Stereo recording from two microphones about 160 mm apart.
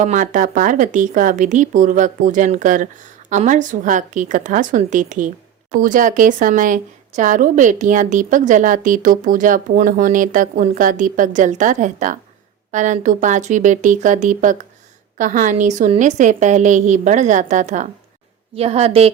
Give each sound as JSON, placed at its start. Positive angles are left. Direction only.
{"t": 0.0, "sound": "a woman's voice", "side_deg": -50}
{"t": 18.5, "sound": "a woman's voice", "side_deg": -40}